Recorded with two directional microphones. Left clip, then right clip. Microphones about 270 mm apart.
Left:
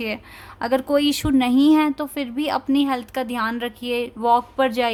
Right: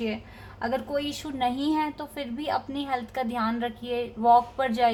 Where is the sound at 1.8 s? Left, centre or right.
Left.